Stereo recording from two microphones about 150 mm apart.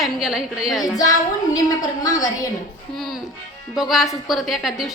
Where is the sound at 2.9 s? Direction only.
Centre (ahead or behind).